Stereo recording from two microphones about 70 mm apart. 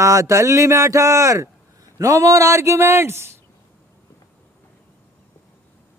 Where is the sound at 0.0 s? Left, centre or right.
Right.